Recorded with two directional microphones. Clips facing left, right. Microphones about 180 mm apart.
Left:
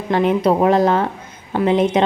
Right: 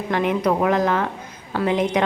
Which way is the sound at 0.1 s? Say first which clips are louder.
Left 5 dB; 30° left (ahead or behind).